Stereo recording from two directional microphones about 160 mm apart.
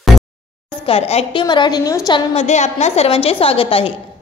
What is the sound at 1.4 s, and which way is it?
Speech, 25° left (ahead or behind).